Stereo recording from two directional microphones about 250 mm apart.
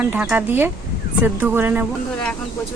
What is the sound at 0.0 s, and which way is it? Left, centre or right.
Speech, centre.